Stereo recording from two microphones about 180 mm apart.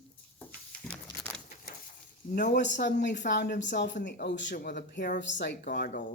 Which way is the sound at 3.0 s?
75° left (ahead or behind).